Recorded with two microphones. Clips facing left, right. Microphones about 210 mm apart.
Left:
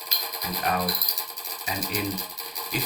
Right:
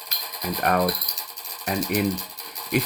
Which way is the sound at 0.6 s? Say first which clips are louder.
Right 6 dB; 55° right (ahead or behind).